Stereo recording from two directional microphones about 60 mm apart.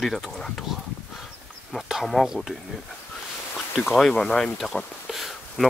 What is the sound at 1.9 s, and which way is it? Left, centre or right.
Speech, centre.